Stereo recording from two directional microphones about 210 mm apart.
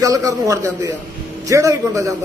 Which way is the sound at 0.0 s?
15° right (ahead or behind).